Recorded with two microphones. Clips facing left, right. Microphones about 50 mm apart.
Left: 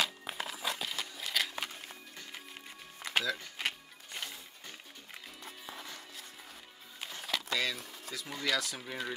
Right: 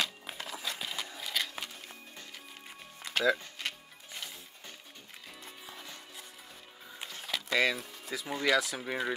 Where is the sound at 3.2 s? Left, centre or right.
Right.